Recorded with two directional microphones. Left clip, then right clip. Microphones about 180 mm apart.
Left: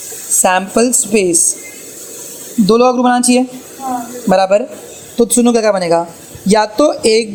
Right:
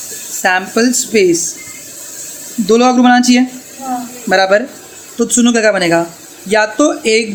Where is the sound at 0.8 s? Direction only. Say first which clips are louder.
Right 1 dB; 15° left (ahead or behind).